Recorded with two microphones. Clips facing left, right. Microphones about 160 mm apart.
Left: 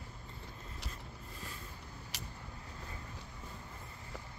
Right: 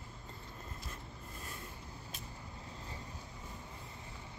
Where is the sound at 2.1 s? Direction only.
80° left.